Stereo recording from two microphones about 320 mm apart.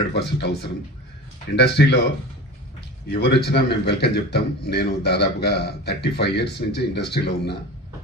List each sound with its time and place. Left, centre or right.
0.1 s a man's voice: left
3.1 s a man's voice: left